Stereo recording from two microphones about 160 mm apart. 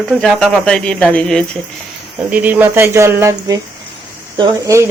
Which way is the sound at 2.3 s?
10° right (ahead or behind).